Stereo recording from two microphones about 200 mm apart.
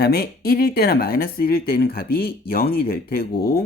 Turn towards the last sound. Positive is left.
turn(degrees=50)  # may be behind; listen again after turning